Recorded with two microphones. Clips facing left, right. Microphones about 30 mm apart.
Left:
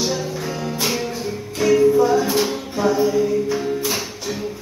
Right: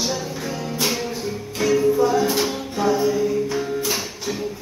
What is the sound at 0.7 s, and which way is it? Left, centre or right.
Music, centre.